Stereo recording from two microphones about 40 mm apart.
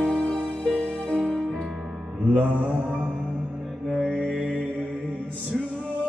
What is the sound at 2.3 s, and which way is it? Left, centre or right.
Mantra, right.